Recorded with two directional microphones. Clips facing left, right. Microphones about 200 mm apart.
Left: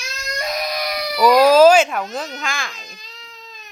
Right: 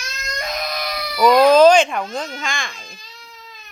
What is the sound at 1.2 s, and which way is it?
Speech, 5° left (ahead or behind).